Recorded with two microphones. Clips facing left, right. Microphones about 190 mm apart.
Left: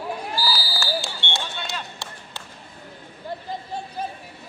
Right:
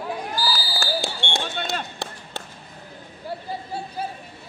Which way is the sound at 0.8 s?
50° right (ahead or behind).